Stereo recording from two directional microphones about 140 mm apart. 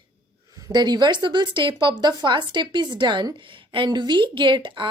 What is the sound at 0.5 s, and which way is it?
Speech, 30° right (ahead or behind).